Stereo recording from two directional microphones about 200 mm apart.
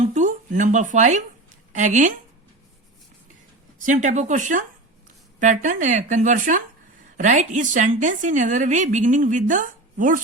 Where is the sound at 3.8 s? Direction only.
40° right (ahead or behind).